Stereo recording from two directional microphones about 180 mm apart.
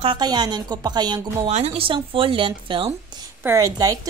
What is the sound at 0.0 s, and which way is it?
Speech, 25° right (ahead or behind).